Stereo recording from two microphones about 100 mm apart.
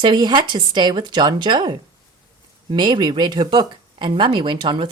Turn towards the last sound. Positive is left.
turn(degrees=-55)  # may be behind; listen again after turning